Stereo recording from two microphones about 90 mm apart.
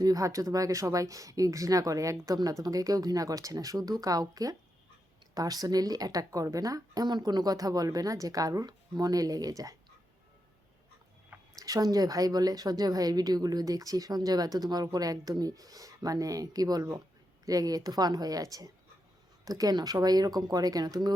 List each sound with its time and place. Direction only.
0.0 s a woman's voice: 40° right (ahead or behind)
11.6 s a woman's voice: 40° right (ahead or behind)